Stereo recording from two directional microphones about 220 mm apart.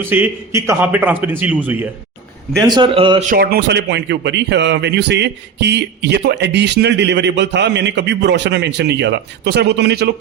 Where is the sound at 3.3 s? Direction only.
45° right (ahead or behind).